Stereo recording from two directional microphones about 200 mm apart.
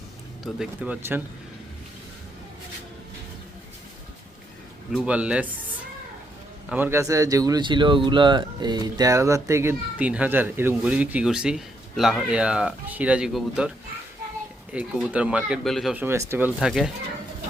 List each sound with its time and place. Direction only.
0.4 s speech: 5° right (ahead or behind)
4.9 s speech: 5° right (ahead or behind)
6.7 s speech: 10° right (ahead or behind)